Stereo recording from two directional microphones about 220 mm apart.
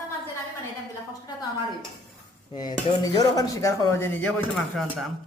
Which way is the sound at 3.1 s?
15° left (ahead or behind).